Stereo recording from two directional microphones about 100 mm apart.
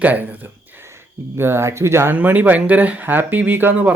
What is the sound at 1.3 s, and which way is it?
Speech, 25° right (ahead or behind).